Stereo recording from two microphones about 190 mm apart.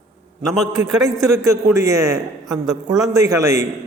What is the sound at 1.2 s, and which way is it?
A man's voice, 15° right (ahead or behind).